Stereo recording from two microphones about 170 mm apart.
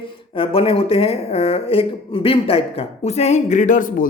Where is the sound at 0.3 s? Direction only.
35° left (ahead or behind).